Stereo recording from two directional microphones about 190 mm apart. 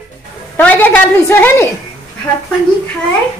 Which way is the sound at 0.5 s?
10° left (ahead or behind).